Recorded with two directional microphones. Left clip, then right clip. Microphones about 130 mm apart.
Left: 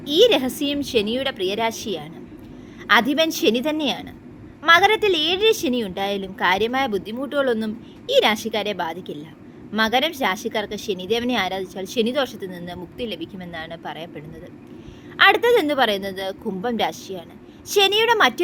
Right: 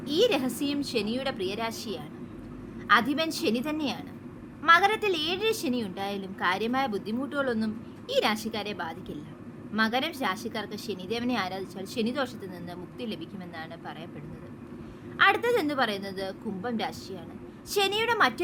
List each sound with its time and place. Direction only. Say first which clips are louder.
0.0 s a woman's voice: left 9 dB; 40° left (ahead or behind)
15.2 s a woman's voice: left 8 dB; 40° left (ahead or behind)